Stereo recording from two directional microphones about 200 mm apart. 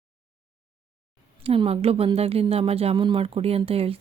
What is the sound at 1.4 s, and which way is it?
Speech, 30° right (ahead or behind).